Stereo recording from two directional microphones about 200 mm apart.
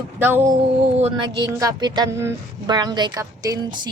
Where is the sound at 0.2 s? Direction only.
10° right (ahead or behind).